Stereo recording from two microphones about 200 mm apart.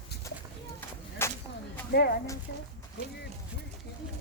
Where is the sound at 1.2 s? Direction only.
10° left (ahead or behind).